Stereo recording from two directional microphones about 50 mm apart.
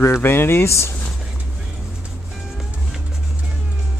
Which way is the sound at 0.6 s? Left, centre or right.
Left.